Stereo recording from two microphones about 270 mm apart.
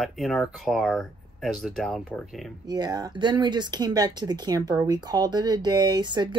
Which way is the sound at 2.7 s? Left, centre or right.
Centre.